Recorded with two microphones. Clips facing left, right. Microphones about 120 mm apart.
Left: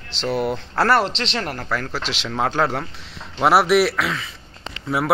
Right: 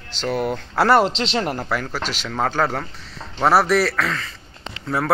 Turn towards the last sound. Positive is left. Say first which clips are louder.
# left 1 dB
turn(degrees=10)  # may be behind; listen again after turning